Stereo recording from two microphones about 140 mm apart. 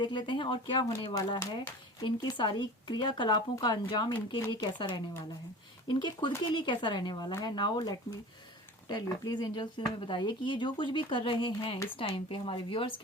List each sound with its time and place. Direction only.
0.0 s speech: 35° left (ahead or behind)